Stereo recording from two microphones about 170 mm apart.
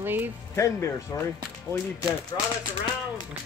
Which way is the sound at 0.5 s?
20° left (ahead or behind).